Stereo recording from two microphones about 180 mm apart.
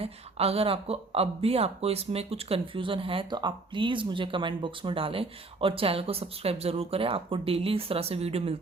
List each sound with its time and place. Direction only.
0.0 s speech: 35° right (ahead or behind)